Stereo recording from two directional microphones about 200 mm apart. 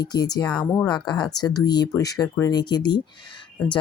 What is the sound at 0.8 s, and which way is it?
Speech, 20° left (ahead or behind).